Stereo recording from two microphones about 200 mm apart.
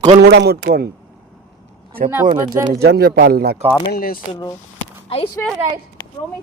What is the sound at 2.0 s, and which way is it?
A man's voice, 45° right (ahead or behind).